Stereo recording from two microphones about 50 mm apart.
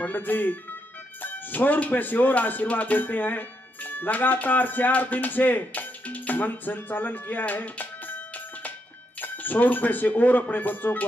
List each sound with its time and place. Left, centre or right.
0.0 s speech: left
9.2 s speech: left